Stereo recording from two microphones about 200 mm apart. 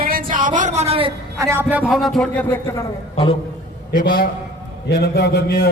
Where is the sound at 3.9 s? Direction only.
45° left (ahead or behind).